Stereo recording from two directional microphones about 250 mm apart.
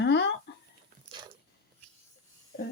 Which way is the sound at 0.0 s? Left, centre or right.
Left.